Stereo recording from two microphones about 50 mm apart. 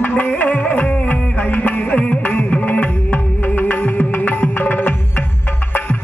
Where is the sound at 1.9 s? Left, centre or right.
Left.